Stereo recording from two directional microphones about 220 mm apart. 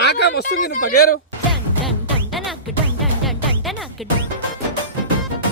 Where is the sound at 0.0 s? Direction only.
50° left (ahead or behind).